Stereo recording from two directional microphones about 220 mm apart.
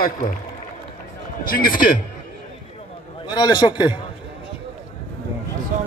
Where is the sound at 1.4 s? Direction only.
40° left (ahead or behind).